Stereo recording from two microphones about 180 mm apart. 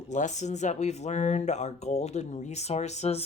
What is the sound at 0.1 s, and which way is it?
Speech, 40° left (ahead or behind).